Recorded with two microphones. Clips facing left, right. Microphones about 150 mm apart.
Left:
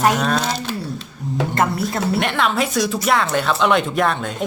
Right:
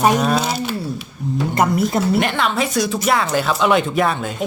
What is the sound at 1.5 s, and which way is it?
Speech, 20° right (ahead or behind).